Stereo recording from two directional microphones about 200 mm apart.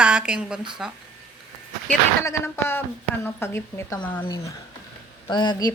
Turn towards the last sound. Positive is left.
turn(degrees=20)  # may be behind; listen again after turning